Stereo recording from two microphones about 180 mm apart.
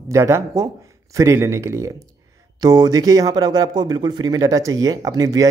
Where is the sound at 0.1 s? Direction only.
15° right (ahead or behind).